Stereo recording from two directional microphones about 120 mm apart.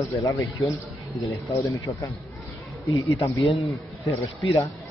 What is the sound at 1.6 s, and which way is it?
Speech, 25° left (ahead or behind).